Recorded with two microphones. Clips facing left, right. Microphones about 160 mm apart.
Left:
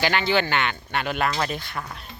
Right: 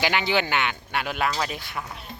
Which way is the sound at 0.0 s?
10° right (ahead or behind).